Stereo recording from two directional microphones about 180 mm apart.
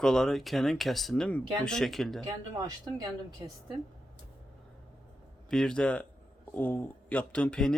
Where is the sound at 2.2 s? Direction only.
20° right (ahead or behind).